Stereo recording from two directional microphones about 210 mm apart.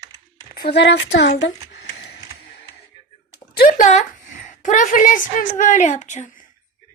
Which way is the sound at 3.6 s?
40° left (ahead or behind).